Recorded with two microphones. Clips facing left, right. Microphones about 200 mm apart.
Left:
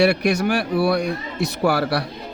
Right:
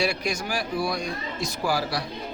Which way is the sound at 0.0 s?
65° left (ahead or behind).